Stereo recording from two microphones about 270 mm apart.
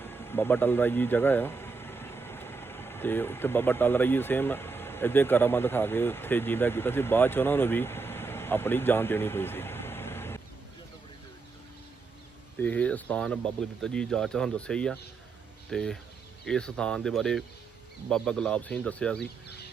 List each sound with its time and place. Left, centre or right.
0.3 s speech: centre
12.5 s speech: centre
19.2 s chicken: left